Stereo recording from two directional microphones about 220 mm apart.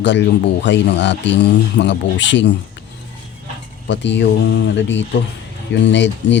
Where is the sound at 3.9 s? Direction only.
55° left (ahead or behind).